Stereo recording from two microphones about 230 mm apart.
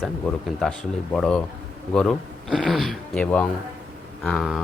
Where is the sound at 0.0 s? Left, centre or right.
Centre.